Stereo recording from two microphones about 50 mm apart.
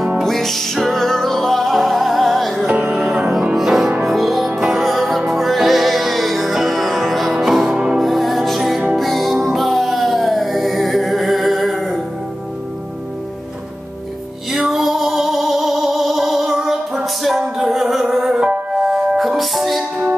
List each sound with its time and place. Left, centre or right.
0.2 s music: centre
2.6 s music: right
3.5 s music: centre
8.0 s music: centre
14.5 s music: centre